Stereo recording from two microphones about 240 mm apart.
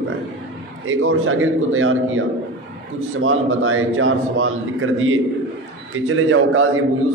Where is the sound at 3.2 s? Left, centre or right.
Right.